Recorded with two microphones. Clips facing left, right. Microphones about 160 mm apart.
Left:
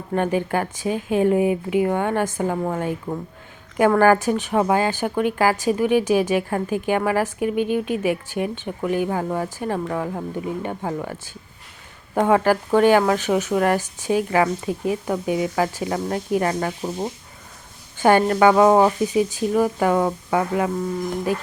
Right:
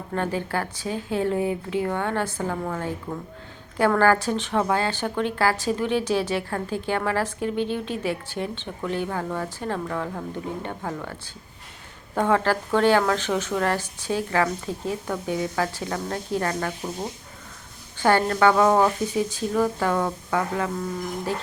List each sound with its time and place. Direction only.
0.1 s a woman's voice: 15° left (ahead or behind)
12.1 s speech: 15° left (ahead or behind)